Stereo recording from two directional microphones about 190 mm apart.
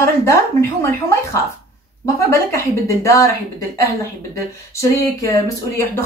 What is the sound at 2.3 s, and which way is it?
Speech, 15° left (ahead or behind).